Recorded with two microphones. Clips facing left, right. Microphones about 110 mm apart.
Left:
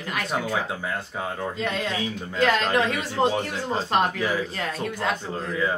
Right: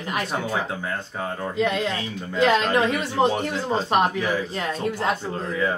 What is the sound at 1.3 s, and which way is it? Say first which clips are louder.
Speech: right 6 dB; 10° right (ahead or behind).